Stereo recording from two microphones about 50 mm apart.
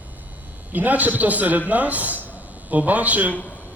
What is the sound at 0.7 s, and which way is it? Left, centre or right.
A man's voice, right.